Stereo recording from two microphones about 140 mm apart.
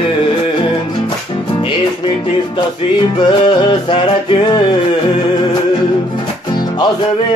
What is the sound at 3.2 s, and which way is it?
Music, 35° left (ahead or behind).